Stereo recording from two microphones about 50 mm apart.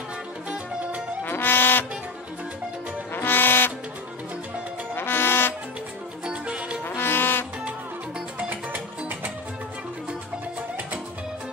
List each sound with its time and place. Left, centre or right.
0.5 s music: right
1.2 s music: left
3.1 s music: left
4.9 s music: left
6.2 s music: right
6.8 s music: left
8.4 s music: right